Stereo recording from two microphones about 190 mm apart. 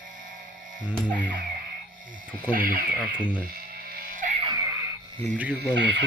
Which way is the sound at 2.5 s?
45° right (ahead or behind).